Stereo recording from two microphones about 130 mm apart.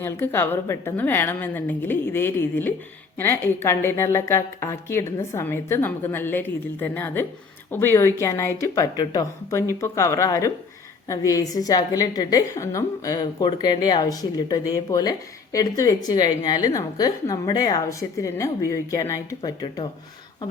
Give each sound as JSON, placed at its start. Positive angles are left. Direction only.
{"t": 0.0, "sound": "a woman's voice", "side_deg": 15}
{"t": 19.4, "sound": "speech", "side_deg": 35}